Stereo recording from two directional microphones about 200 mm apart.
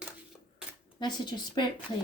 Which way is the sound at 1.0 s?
20° left (ahead or behind).